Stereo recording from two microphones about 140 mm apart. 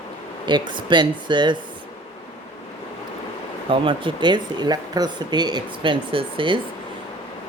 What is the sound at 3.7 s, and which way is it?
Speech, 35° right (ahead or behind).